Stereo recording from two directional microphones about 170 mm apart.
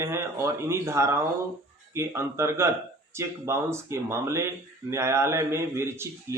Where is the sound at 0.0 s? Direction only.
15° right (ahead or behind).